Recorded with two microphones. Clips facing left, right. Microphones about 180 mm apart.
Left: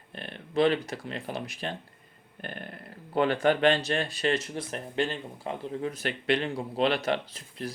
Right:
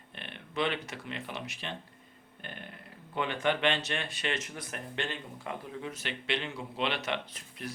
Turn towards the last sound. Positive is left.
turn(degrees=35)  # may be behind; listen again after turning